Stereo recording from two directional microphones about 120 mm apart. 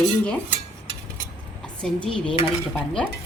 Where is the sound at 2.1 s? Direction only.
45° left (ahead or behind).